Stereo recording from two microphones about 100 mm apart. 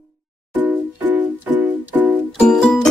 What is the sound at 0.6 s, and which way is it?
Music, 15° right (ahead or behind).